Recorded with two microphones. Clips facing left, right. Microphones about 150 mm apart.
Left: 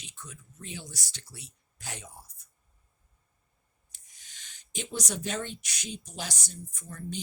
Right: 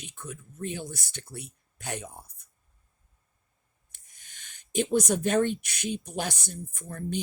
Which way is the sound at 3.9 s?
55° right (ahead or behind).